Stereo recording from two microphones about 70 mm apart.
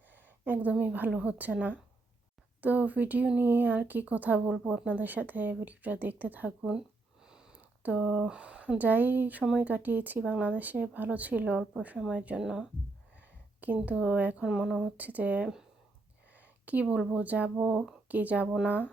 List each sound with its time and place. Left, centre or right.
0.1 s a woman's voice: right
7.3 s a sound: centre
7.8 s speech: right
9.4 s speech: centre
9.6 s speech: right
12.4 s speech: centre
13.1 s a sound: right
13.7 s speech: centre
14.4 s speech: centre
14.9 s speech: right
16.3 s a sound: right
17.1 s speech: right